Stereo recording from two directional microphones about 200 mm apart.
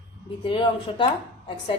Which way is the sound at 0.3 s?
25° left (ahead or behind).